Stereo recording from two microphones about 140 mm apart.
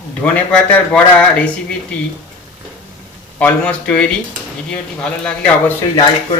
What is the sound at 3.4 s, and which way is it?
Speech, 10° left (ahead or behind).